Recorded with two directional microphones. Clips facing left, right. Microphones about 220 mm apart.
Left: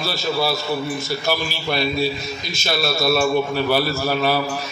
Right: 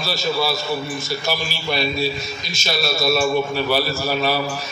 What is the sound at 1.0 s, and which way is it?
A man's voice, 55° left (ahead or behind).